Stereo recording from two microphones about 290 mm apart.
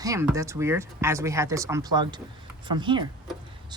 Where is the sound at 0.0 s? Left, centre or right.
Centre.